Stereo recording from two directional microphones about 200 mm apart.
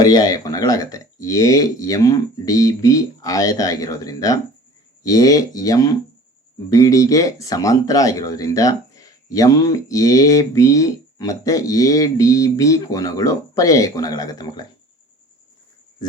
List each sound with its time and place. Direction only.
0.0 s speech: 20° left (ahead or behind)